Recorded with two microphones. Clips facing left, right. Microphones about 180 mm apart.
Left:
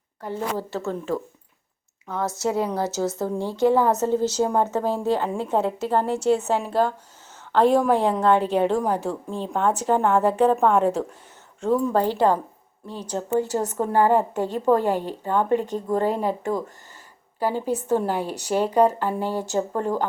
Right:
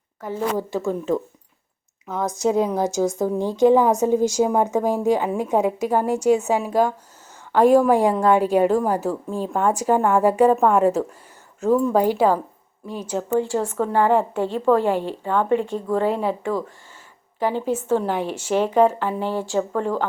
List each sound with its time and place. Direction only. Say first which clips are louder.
0.5 s a woman's voice: right 4 dB; 15° right (ahead or behind)
13.4 s speech: right 2 dB; 40° left (ahead or behind)
17.5 s speech: right 1 dB; 35° left (ahead or behind)